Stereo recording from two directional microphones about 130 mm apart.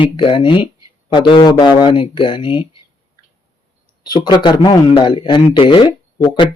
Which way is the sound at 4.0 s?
30° left (ahead or behind).